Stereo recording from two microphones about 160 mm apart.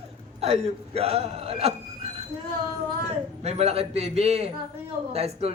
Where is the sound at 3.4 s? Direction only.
40° right (ahead or behind).